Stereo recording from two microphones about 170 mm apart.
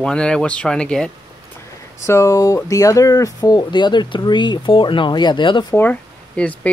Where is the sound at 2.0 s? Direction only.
15° left (ahead or behind).